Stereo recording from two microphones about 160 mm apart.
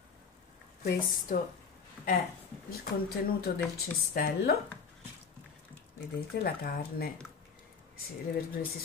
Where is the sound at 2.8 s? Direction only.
70° left (ahead or behind).